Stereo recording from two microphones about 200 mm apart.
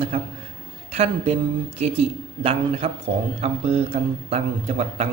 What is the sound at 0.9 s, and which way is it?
A woman's voice, 30° right (ahead or behind).